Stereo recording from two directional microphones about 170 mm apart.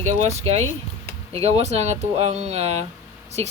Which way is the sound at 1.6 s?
40° right (ahead or behind).